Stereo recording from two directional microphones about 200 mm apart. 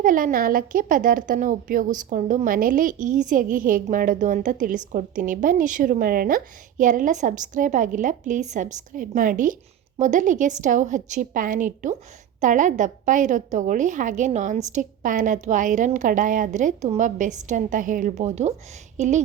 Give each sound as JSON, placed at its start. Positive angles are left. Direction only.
{"t": 0.0, "sound": "a woman's voice", "side_deg": -40}